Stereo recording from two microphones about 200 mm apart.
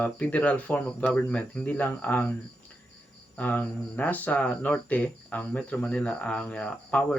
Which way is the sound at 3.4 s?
10° left (ahead or behind).